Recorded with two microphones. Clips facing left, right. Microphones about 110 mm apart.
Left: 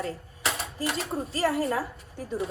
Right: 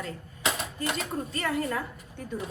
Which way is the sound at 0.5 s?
Centre (ahead or behind).